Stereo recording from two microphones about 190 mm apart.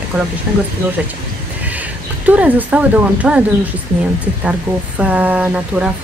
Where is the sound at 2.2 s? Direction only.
10° right (ahead or behind).